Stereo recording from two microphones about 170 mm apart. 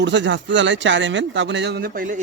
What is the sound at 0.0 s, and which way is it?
Speech, 90° right.